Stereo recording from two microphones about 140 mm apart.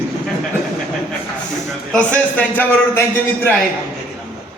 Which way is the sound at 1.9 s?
10° left (ahead or behind).